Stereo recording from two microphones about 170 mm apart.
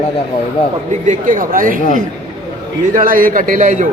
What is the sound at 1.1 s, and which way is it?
Speech, 50° right (ahead or behind).